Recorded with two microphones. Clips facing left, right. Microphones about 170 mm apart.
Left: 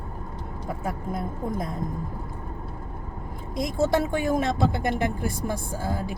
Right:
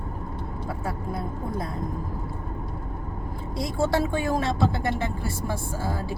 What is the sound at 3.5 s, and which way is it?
Speech, 20° left (ahead or behind).